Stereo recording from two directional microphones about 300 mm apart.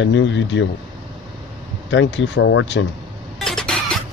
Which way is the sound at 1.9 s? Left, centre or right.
Left.